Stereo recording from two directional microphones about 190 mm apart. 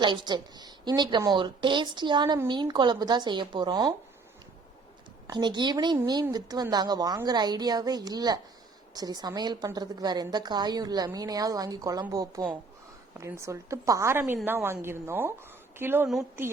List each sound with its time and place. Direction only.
0.0 s a woman's voice: 25° right (ahead or behind)
5.3 s a woman's voice: 25° right (ahead or behind); by 16.4 s 5° right (ahead or behind)